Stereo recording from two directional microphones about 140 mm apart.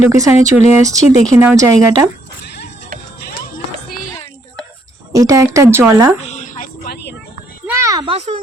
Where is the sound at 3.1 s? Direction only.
90° left.